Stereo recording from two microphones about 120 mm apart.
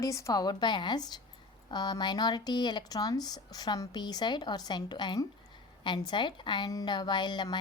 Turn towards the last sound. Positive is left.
turn(degrees=35)  # may be behind; listen again after turning